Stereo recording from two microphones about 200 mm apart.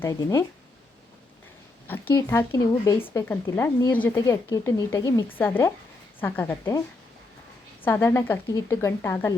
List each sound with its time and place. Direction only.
0.0 s speech: 15° left (ahead or behind)
2.2 s speech: 10° left (ahead or behind)
7.9 s speech: 10° left (ahead or behind)